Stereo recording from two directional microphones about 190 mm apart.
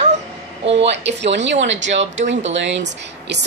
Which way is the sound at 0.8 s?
65° right (ahead or behind).